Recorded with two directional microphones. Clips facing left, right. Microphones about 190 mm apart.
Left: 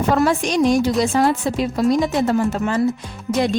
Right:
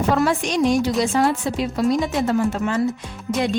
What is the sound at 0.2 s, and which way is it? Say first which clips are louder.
A woman's voice: left 2 dB; 40° left (ahead or behind).